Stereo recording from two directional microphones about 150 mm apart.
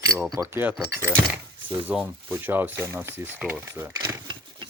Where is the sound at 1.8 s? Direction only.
10° right (ahead or behind).